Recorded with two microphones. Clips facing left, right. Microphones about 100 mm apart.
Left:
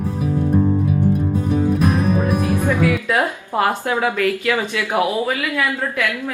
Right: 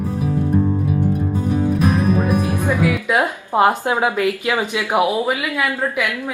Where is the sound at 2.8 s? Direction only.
15° right (ahead or behind).